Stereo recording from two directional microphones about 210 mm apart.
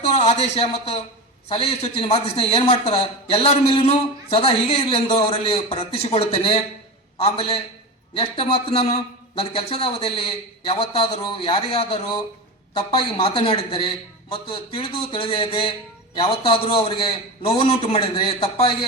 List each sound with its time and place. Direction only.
0.2 s a man's voice: 30° left (ahead or behind)